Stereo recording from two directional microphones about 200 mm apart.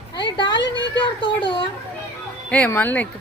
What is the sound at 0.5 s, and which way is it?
Speech, 65° left (ahead or behind).